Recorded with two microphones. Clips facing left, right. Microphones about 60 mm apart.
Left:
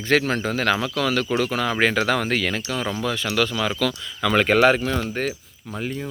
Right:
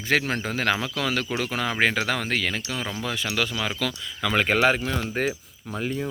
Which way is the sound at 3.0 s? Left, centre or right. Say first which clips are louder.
Left 4 dB; centre.